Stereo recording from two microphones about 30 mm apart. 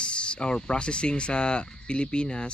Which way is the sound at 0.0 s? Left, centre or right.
Left.